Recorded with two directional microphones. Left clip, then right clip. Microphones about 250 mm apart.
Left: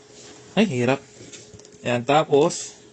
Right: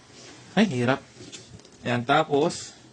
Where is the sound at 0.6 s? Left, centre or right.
Centre.